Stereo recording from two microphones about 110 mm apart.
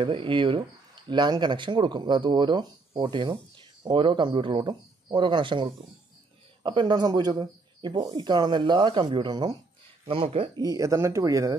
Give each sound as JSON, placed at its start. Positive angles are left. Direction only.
{"t": 0.0, "sound": "speech", "side_deg": -50}
{"t": 10.0, "sound": "speech", "side_deg": -60}
{"t": 10.5, "sound": "speech", "side_deg": -35}